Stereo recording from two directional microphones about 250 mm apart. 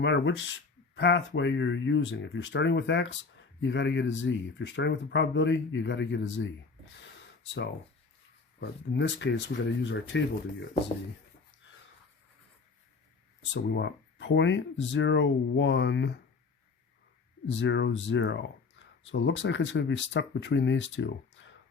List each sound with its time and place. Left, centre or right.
0.0 s speech: left
6.9 s a sound: left
9.0 s speech: left
13.5 s speech: left
17.5 s speech: left